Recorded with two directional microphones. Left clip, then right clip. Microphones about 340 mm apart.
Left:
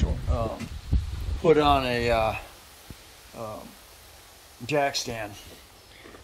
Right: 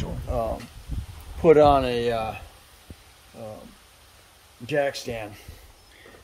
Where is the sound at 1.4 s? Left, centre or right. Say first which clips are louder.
Right 4 dB; centre.